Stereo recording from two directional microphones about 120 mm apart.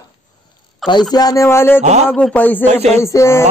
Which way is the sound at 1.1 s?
30° left (ahead or behind).